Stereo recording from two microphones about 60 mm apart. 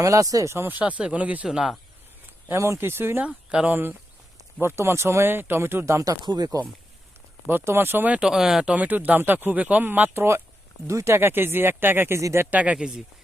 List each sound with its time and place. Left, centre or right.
0.0 s speech: right
0.7 s speech: right
1.5 s speech: centre
2.6 s speech: right
3.2 s speech: centre
3.7 s speech: right
7.6 s speech: right
8.1 s speech: centre
8.6 s speech: right
10.2 s speech: right
12.5 s speech: right
12.7 s speech: centre